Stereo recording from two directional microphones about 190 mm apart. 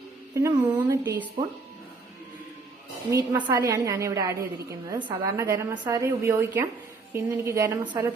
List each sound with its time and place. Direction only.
0.3 s a woman's voice: 15° right (ahead or behind)
3.4 s a woman's voice: 15° right (ahead or behind)